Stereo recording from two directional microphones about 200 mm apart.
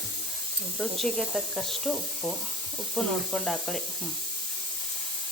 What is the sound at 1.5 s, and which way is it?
Speech, centre (ahead or behind).